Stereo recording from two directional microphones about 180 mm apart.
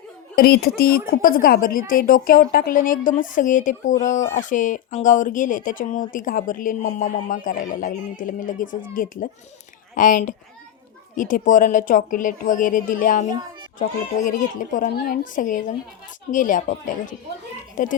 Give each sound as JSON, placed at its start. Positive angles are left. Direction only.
{"t": 0.3, "sound": "a woman's voice", "side_deg": 60}